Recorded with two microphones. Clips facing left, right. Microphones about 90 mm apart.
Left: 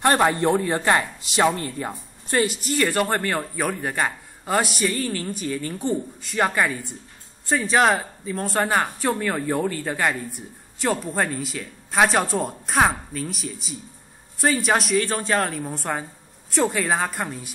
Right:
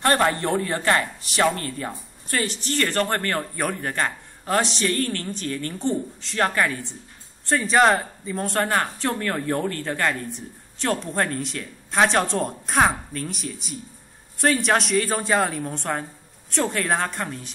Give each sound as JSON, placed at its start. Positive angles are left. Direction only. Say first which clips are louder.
{"t": 0.0, "sound": "speech", "louder": "left 2 dB", "side_deg": 20}
{"t": 3.5, "sound": "a woman's voice", "louder": "left 1 dB", "side_deg": 0}
{"t": 8.6, "sound": "a woman's voice", "louder": "left 1 dB", "side_deg": 10}